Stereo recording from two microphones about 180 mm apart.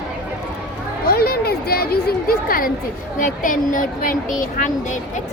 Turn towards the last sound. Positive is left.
turn(degrees=45)  # may be behind; listen again after turning